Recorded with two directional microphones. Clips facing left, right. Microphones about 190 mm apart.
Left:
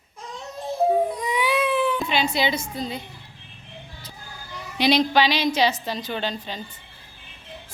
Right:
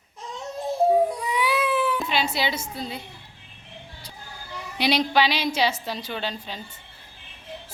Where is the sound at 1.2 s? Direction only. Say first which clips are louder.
Left 2 dB; centre (ahead or behind).